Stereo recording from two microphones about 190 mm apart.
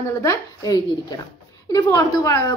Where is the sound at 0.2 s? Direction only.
15° left (ahead or behind).